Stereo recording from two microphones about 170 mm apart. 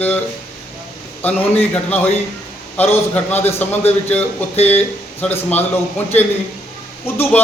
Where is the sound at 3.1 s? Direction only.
10° left (ahead or behind).